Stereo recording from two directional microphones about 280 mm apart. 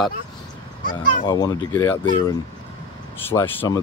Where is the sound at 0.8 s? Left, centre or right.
Left.